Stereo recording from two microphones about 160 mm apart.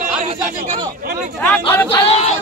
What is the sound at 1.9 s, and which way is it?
Speech, 40° left (ahead or behind).